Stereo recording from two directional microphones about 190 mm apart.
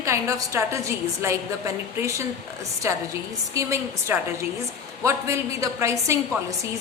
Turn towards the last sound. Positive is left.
turn(degrees=-15)  # may be behind; listen again after turning